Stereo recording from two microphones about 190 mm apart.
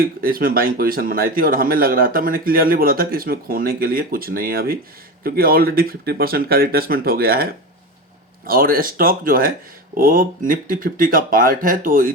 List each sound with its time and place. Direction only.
0.0 s speech: 50° right (ahead or behind)